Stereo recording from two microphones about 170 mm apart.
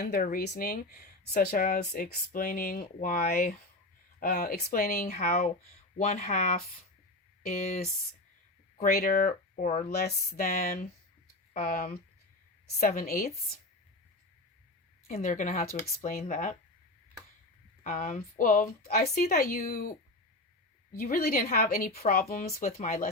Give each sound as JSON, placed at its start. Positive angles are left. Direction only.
{"t": 0.0, "sound": "speech", "side_deg": 60}
{"t": 8.8, "sound": "speech", "side_deg": 55}
{"t": 9.9, "sound": "speech", "side_deg": 65}
{"t": 15.1, "sound": "speech", "side_deg": 50}
{"t": 17.8, "sound": "speech", "side_deg": 50}